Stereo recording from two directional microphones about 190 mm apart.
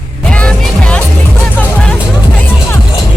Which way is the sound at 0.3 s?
5° left (ahead or behind).